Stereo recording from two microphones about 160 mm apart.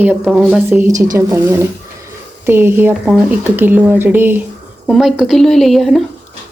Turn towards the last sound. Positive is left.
turn(degrees=0)  # may be behind; listen again after turning